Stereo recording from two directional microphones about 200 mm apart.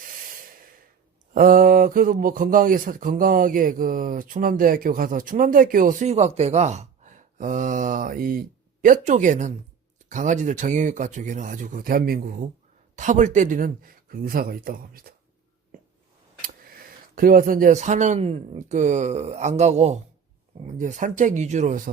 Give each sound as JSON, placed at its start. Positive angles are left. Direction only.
{"t": 1.3, "sound": "speech", "side_deg": -45}
{"t": 15.7, "sound": "a sound", "side_deg": -45}
{"t": 17.2, "sound": "speech", "side_deg": -45}